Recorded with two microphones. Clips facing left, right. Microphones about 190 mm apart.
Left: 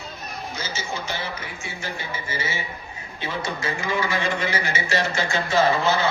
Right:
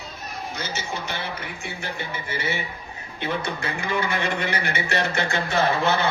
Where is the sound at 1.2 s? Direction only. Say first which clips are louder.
Even; 60° right (ahead or behind).